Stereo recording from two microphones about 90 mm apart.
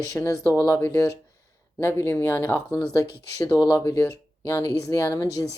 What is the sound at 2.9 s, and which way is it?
Speech, 40° left (ahead or behind).